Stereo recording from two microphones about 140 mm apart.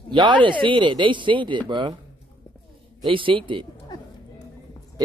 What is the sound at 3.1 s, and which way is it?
Speech, 35° right (ahead or behind).